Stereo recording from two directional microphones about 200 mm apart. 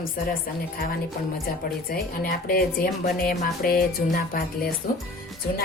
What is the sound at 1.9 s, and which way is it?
A woman's voice, 45° left (ahead or behind).